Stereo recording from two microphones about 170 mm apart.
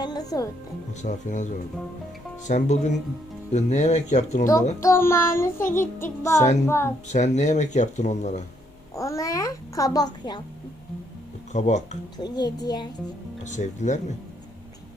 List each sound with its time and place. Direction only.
0.0 s music: 25° left (ahead or behind)
1.0 s speech: 45° left (ahead or behind)
2.5 s speech: 45° left (ahead or behind)
4.8 s child singing: 15° left (ahead or behind)
6.4 s speech: 45° left (ahead or behind)
6.7 s child singing: 15° left (ahead or behind)
7.1 s speech: 45° left (ahead or behind)
9.0 s a child's voice: 20° left (ahead or behind)
11.5 s speech: 45° left (ahead or behind)
12.1 s a child's voice: 25° left (ahead or behind)
13.4 s speech: 45° left (ahead or behind)